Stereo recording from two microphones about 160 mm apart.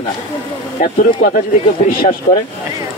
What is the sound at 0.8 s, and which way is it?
Speech, 65° left (ahead or behind).